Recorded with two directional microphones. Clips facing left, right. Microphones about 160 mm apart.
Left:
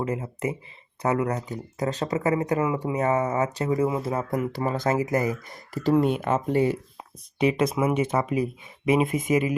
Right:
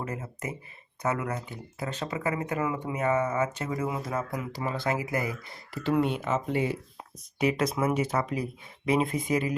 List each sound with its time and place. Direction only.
0.0 s speech: 25° left (ahead or behind)
4.3 s speech: 50° left (ahead or behind)
7.3 s speech: 25° left (ahead or behind)